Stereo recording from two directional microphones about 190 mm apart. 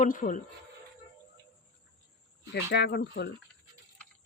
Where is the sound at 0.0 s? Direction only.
45° left (ahead or behind).